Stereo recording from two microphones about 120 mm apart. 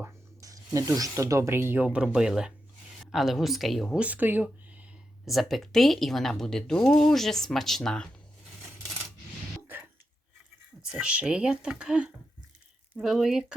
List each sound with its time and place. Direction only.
0.0 s speech: 30° right (ahead or behind); by 4.0 s centre (ahead or behind)
4.0 s speech: 15° right (ahead or behind)
5.2 s speech: centre (ahead or behind)
10.9 s speech: 10° right (ahead or behind)